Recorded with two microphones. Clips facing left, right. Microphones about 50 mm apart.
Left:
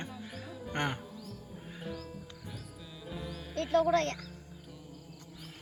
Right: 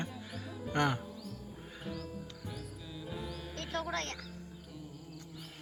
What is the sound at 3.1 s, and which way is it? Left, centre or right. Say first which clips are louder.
Music: left 1 dB; centre.